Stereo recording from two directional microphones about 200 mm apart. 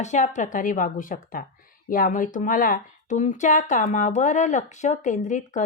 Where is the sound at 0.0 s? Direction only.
35° left (ahead or behind).